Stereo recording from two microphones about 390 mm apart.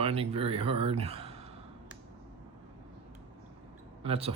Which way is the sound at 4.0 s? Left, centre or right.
Centre.